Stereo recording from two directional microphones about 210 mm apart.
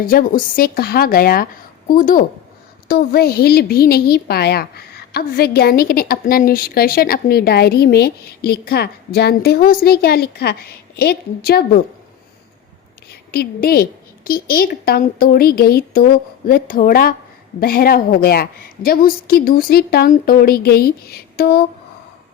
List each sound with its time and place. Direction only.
0.0 s a woman's voice: 45° left (ahead or behind)
13.1 s a woman's voice: 50° left (ahead or behind)